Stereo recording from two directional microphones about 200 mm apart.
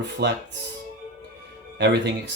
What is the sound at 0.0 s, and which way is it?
Speech, 60° right (ahead or behind).